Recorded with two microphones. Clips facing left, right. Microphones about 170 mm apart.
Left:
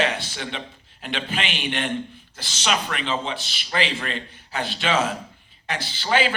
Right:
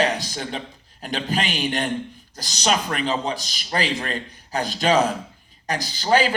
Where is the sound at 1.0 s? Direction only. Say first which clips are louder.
Right 3 dB; 40° right (ahead or behind).